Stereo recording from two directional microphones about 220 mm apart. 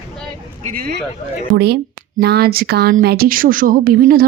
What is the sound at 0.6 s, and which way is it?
Speech, 40° right (ahead or behind).